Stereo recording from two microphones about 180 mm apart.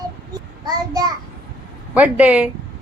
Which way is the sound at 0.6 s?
20° right (ahead or behind).